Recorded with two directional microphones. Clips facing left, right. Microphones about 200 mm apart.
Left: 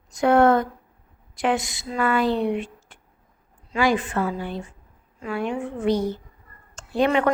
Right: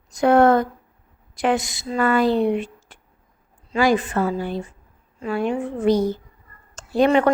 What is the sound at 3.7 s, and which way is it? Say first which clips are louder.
Speech: right 3 dB; 40° right (ahead or behind).